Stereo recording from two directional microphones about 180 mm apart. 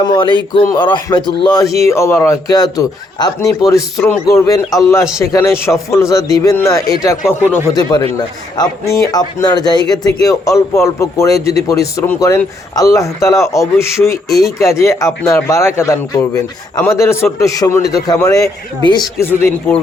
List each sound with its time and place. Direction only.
0.0 s a man's voice: 25° left (ahead or behind)
14.3 s speech: centre (ahead or behind)
14.6 s a man's voice: 15° left (ahead or behind)
19.2 s a man's voice: 15° left (ahead or behind)